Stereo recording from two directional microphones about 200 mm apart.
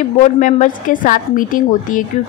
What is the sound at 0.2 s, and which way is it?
A woman's voice, 35° left (ahead or behind).